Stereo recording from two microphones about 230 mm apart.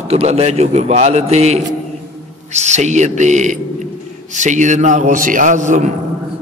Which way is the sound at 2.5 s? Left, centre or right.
Right.